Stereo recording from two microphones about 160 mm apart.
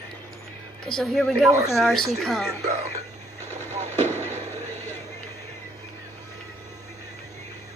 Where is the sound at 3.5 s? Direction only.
45° right (ahead or behind).